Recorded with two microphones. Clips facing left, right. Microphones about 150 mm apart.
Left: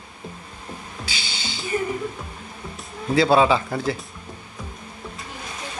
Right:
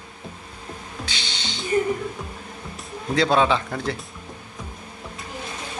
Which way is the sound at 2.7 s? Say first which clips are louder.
Left 3 dB; centre (ahead or behind).